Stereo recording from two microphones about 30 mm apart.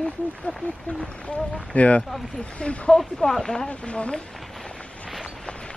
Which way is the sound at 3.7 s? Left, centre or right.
Left.